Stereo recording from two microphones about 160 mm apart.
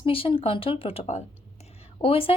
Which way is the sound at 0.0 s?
35° left (ahead or behind).